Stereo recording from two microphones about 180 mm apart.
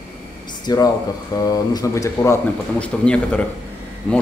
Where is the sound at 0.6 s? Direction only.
20° left (ahead or behind).